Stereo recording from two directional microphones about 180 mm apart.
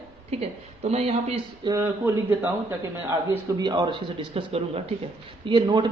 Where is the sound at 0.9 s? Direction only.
35° right (ahead or behind).